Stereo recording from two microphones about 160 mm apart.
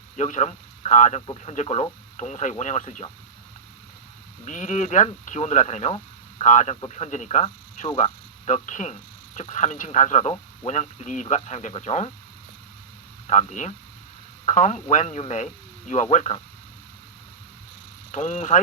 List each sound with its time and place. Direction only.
0.2 s speech: 50° left (ahead or behind)
4.4 s speech: 50° left (ahead or behind)
13.2 s speech: 50° left (ahead or behind)
18.1 s speech: 45° left (ahead or behind)